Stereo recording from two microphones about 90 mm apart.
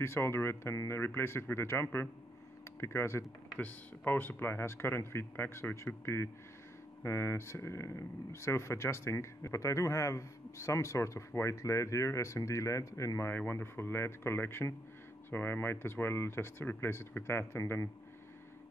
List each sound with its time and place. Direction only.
0.0 s speech: 25° left (ahead or behind)
3.5 s speech: 20° left (ahead or behind); by 13.3 s 35° left (ahead or behind)
13.3 s speech: 25° left (ahead or behind)